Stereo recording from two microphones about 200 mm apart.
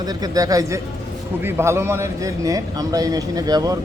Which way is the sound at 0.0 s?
20° right (ahead or behind).